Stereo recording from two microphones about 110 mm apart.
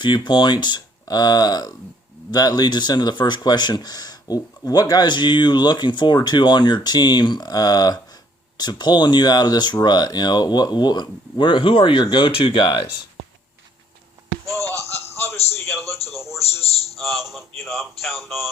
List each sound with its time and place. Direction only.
0.0 s speech: 45° left (ahead or behind)
14.7 s a sound: 25° left (ahead or behind)
15.5 s a man's voice: 25° left (ahead or behind)
16.4 s a man's voice: 70° left (ahead or behind)
17.0 s a man's voice: centre (ahead or behind)